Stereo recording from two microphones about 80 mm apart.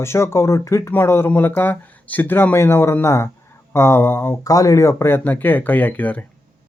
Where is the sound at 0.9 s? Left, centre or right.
Left.